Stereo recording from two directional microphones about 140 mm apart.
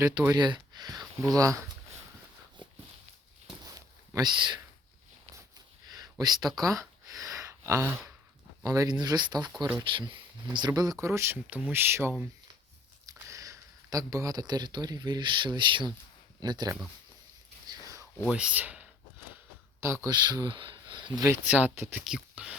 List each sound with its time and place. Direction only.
0.0 s speech: 20° right (ahead or behind)
3.6 s a sound: 25° right (ahead or behind)
7.2 s gasp: 25° right (ahead or behind)
8.6 s speech: 25° right (ahead or behind)
17.7 s a sound: 25° right (ahead or behind)
18.3 s speech: 5° right (ahead or behind)
20.1 s speech: 30° right (ahead or behind)
21.2 s speech: 15° right (ahead or behind)